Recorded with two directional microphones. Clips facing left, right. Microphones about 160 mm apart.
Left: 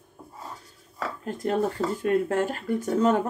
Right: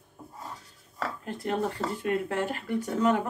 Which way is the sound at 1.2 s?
45° left (ahead or behind).